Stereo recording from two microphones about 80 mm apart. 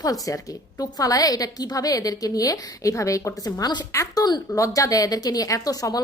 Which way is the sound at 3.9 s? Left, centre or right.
Left.